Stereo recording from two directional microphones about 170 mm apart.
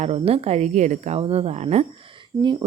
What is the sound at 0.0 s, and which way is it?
Speech, 40° right (ahead or behind).